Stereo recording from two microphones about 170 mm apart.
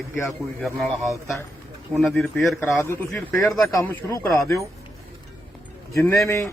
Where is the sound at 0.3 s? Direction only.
Centre (ahead or behind).